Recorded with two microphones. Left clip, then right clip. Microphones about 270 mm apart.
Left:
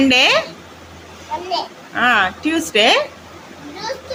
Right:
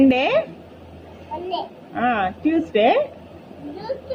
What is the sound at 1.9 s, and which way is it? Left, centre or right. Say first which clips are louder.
A woman's voice: left 6 dB; centre.